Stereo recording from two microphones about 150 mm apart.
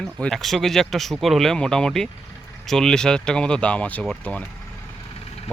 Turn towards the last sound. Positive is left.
turn(degrees=5)  # may be behind; listen again after turning